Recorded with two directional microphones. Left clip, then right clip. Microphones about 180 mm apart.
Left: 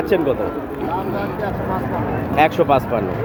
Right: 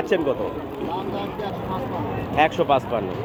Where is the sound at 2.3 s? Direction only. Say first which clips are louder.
Left 4 dB; centre (ahead or behind).